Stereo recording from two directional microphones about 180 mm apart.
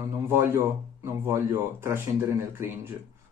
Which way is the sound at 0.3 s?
15° right (ahead or behind).